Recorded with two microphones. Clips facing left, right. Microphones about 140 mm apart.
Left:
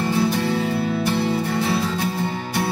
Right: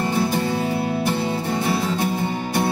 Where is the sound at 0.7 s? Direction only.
20° right (ahead or behind).